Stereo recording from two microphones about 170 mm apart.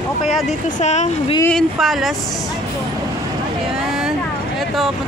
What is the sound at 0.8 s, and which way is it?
Speech, 40° left (ahead or behind).